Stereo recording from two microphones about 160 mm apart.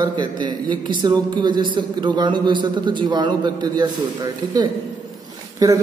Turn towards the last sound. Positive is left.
turn(degrees=-20)  # may be behind; listen again after turning